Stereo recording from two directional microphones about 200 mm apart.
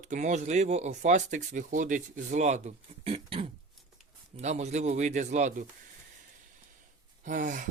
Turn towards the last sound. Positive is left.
turn(degrees=-40)  # may be behind; listen again after turning